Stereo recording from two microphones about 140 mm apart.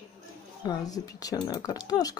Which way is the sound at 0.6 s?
25° left (ahead or behind).